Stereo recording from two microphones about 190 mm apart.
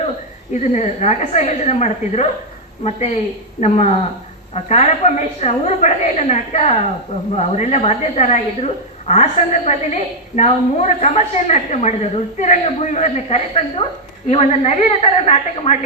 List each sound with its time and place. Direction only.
0.5 s a woman's voice: 40° left (ahead or behind)
3.6 s a woman's voice: 35° left (ahead or behind)